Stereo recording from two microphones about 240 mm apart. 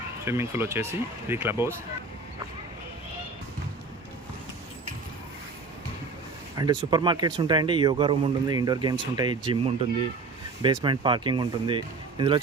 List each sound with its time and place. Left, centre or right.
0.3 s speech: centre
6.6 s speech: centre
10.8 s speech: centre